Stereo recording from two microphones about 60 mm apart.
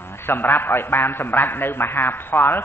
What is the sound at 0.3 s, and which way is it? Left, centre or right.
A man's voice, left.